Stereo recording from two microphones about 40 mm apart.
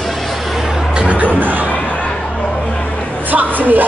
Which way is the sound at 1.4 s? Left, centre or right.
Right.